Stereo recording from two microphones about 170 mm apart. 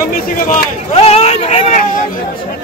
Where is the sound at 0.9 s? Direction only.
35° left (ahead or behind).